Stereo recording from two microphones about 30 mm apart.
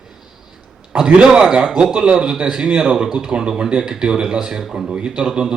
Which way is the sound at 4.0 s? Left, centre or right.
Right.